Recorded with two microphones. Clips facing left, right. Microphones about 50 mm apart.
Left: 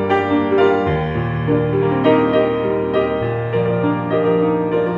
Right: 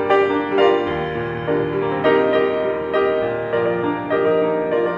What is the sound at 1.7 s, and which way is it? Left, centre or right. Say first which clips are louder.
Music: left 3 dB; left.